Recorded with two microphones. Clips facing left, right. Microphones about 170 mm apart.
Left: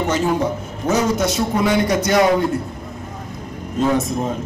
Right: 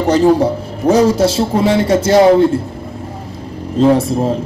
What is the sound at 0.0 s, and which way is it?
A man's voice, 35° right (ahead or behind).